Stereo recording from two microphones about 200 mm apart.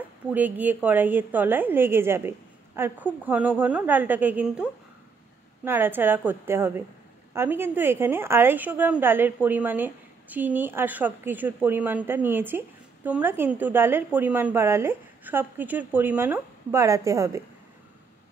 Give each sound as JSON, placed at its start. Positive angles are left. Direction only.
{"t": 0.3, "sound": "a woman's voice", "side_deg": -10}
{"t": 5.7, "sound": "a woman's voice", "side_deg": -10}